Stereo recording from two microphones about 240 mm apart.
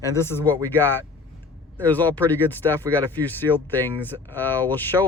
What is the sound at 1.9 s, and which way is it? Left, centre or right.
Speech, centre.